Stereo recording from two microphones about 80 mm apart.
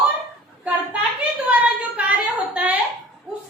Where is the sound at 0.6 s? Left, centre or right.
Centre.